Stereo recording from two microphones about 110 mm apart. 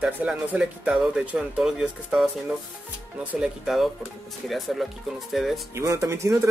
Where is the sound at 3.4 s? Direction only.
5° right (ahead or behind).